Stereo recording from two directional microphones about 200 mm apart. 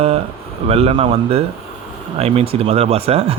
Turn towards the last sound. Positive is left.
turn(degrees=-30)  # may be behind; listen again after turning